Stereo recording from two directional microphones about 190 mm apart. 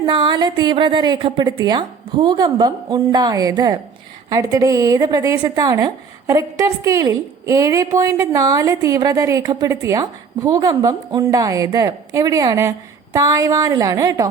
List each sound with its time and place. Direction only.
0.0 s a woman's voice: 25° right (ahead or behind)